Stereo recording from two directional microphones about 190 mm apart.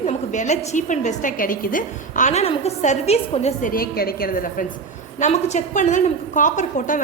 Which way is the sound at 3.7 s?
50° left (ahead or behind).